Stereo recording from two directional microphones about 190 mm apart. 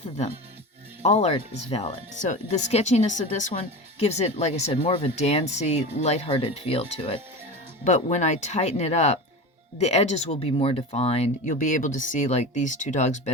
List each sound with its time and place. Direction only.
1.0 s speech: 35° left (ahead or behind)